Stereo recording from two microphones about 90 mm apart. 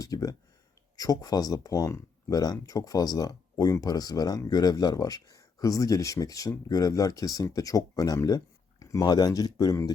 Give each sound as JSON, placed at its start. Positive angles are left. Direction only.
{"t": 0.0, "sound": "speech", "side_deg": 40}